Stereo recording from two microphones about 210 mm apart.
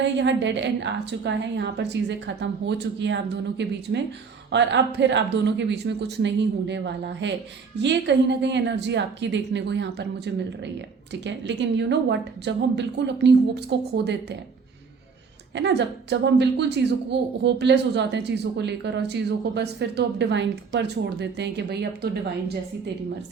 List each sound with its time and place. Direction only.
0.0 s a woman's voice: 60° right (ahead or behind)
15.5 s a woman's voice: 55° right (ahead or behind)